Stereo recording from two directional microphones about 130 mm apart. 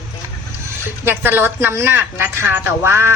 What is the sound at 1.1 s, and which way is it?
A woman's voice, 15° right (ahead or behind).